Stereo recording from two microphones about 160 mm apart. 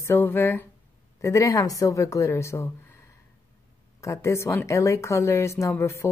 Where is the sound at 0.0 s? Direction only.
15° left (ahead or behind).